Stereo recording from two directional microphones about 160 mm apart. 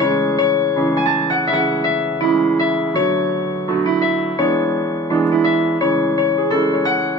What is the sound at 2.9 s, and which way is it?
Music, 20° left (ahead or behind).